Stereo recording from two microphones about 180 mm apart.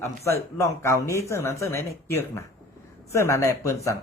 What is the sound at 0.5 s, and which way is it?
Speech, 15° left (ahead or behind).